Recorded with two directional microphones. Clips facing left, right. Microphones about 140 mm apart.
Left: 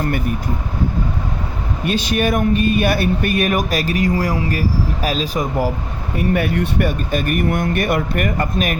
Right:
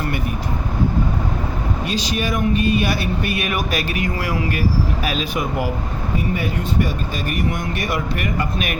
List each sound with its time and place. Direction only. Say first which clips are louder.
1.8 s speech: left 7 dB; 55° left (ahead or behind); by 5.7 s 40° left (ahead or behind)
6.1 s speech: left 6 dB; 60° left (ahead or behind); by 8.8 s 40° left (ahead or behind)